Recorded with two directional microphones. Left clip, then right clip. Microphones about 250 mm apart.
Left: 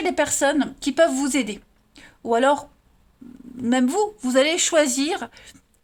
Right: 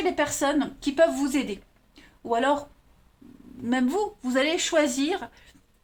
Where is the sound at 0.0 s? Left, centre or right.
Left.